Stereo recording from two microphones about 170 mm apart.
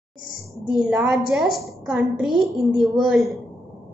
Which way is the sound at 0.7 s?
5° right (ahead or behind).